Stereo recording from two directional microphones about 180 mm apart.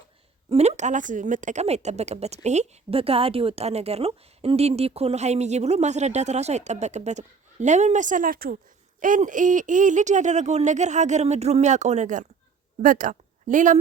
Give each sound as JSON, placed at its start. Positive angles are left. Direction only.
{"t": 0.5, "sound": "a woman's voice", "side_deg": -40}